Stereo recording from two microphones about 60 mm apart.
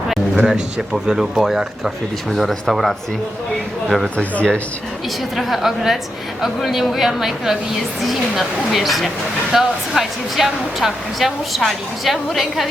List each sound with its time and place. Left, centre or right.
0.3 s speech: centre
4.2 s speech: left
5.4 s speech: centre